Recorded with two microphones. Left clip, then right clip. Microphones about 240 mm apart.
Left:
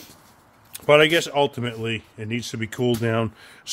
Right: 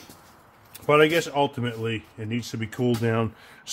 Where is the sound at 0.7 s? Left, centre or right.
Left.